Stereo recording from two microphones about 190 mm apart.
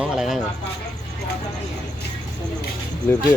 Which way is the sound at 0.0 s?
Centre (ahead or behind).